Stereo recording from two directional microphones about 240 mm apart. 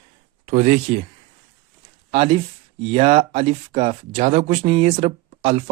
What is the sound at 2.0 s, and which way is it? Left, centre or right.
Speech, right.